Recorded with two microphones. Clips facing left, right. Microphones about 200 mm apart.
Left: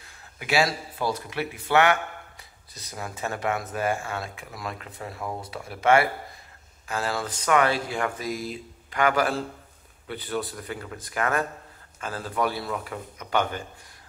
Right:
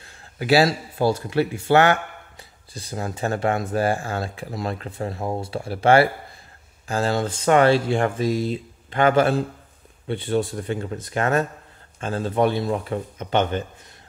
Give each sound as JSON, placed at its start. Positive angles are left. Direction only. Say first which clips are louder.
{"t": 0.4, "sound": "speech", "louder": "right 7 dB", "side_deg": -35}